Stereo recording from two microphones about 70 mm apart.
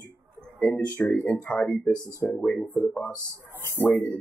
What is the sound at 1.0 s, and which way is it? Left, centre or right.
Speech, left.